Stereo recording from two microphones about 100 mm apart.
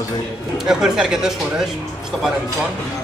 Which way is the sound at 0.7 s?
5° right (ahead or behind).